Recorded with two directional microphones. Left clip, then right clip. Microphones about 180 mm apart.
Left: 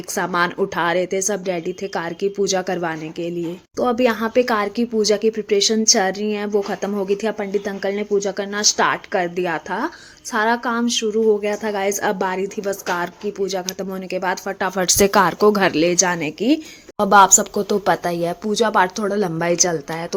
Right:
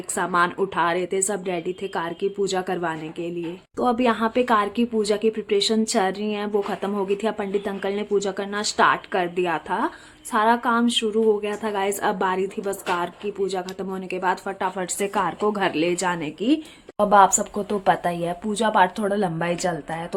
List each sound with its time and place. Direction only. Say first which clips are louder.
0.1 s a woman's voice: left 1 dB; 20° left (ahead or behind)
14.8 s speech: left 9 dB; 40° left (ahead or behind); by 20.1 s 20° left (ahead or behind)